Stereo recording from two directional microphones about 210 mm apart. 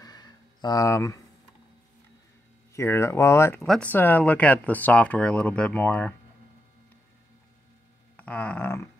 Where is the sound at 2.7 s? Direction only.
10° left (ahead or behind).